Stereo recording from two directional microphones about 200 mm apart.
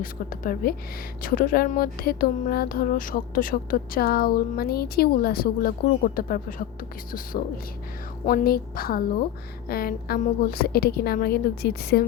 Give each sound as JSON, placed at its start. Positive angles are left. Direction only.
{"t": 0.0, "sound": "speech", "side_deg": 45}
{"t": 8.3, "sound": "speech", "side_deg": 50}